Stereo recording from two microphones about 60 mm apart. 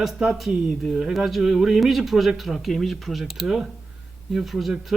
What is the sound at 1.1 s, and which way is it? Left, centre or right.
Speech, centre.